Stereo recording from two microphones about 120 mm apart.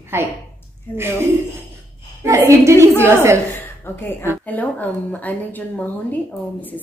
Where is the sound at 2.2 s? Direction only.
25° right (ahead or behind).